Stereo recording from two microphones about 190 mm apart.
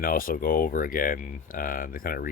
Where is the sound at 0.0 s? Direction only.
50° left (ahead or behind).